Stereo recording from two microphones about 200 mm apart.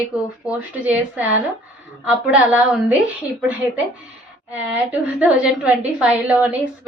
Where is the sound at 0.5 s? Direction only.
5° right (ahead or behind).